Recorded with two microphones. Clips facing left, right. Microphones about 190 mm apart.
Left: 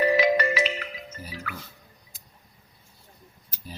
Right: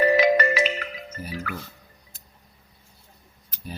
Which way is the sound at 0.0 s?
50° right (ahead or behind).